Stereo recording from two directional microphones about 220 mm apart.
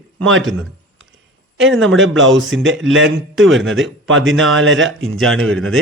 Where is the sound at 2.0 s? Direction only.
60° right (ahead or behind).